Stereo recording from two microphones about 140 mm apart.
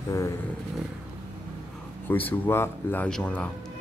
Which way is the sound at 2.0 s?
15° left (ahead or behind).